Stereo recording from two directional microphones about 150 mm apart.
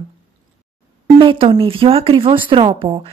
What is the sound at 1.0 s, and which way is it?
A woman's voice, 30° right (ahead or behind).